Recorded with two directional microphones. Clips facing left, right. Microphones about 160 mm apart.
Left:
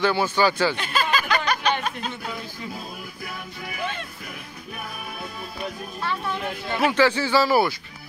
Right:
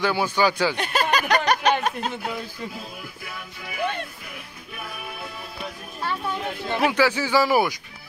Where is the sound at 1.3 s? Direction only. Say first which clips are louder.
Right 3 dB; 40° right (ahead or behind).